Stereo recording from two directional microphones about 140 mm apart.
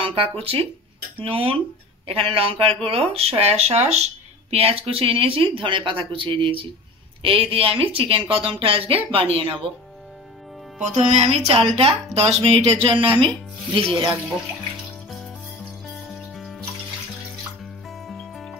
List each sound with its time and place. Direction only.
0.0 s speech: 40° right (ahead or behind)
10.8 s speech: 55° right (ahead or behind); by 13.3 s 40° right (ahead or behind)
16.3 s water: centre (ahead or behind)
18.0 s music: centre (ahead or behind)